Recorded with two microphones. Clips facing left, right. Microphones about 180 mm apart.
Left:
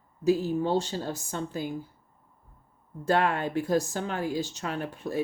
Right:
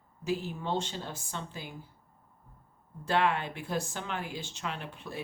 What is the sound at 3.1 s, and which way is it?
Speech, 45° left (ahead or behind).